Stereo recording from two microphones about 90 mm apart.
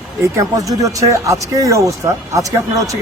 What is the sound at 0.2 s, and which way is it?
Speech, 35° right (ahead or behind).